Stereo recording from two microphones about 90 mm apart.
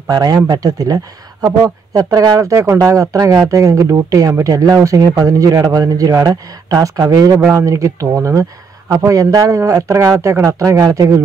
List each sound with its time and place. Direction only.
0.1 s speech: 45° right (ahead or behind)
2.8 s speech: 40° right (ahead or behind)